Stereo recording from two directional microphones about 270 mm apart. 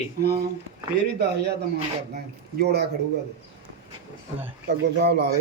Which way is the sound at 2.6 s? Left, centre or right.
Right.